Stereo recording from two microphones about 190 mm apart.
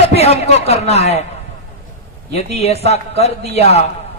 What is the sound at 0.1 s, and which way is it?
A man's voice, 35° left (ahead or behind).